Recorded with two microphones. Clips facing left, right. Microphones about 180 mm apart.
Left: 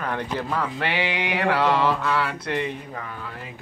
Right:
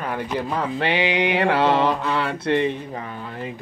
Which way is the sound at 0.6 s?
20° right (ahead or behind).